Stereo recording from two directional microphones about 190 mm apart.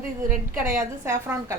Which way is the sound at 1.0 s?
15° right (ahead or behind).